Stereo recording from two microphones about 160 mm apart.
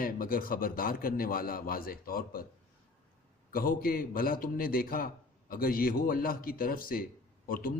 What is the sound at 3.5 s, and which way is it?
A man's voice, 65° left (ahead or behind).